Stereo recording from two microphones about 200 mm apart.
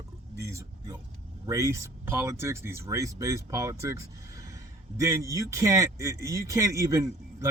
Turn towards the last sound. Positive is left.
turn(degrees=-15)  # may be behind; listen again after turning